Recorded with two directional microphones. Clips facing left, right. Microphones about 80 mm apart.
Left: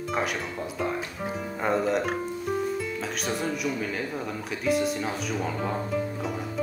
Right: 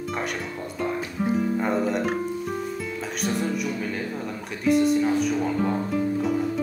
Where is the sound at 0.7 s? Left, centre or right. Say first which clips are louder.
Right 4 dB; centre.